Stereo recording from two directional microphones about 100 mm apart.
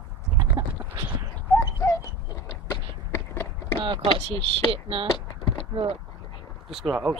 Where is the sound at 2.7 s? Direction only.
25° left (ahead or behind).